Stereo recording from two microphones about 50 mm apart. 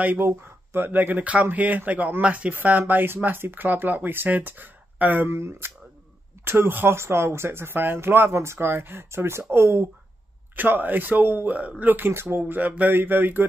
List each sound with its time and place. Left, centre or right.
0.0 s speech: right
0.3 s speech: right
5.2 s speech: right
6.9 s speech: right
10.5 s speech: right
12.1 s speech: right